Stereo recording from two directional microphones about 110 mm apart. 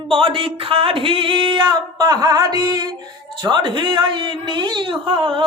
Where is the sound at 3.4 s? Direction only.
50° right (ahead or behind).